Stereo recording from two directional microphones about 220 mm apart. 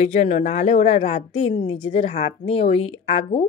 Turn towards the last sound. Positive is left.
turn(degrees=25)  # may be behind; listen again after turning